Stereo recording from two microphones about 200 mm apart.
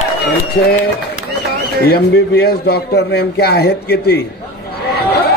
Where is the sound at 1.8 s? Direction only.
50° left (ahead or behind).